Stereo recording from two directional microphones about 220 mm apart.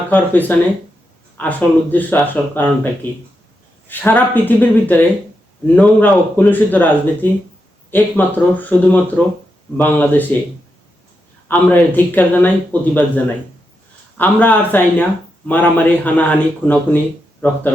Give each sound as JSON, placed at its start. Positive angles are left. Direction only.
{"t": 0.1, "sound": "speech", "side_deg": 10}
{"t": 11.4, "sound": "speech", "side_deg": 10}